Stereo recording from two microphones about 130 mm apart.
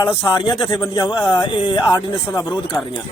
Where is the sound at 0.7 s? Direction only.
25° left (ahead or behind).